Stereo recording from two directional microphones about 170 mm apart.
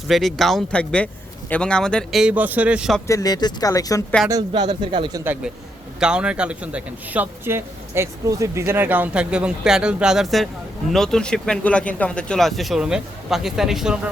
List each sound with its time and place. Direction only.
0.1 s speech: centre (ahead or behind)
3.1 s speech: 20° left (ahead or behind)
4.3 s speech: 25° right (ahead or behind)
5.2 s a man's voice: 10° right (ahead or behind)